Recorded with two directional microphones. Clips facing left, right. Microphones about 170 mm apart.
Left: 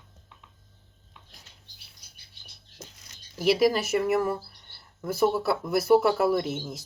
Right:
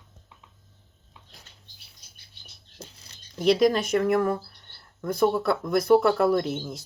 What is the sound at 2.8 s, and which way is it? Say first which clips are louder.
Tearing: right 2 dB; 30° right (ahead or behind).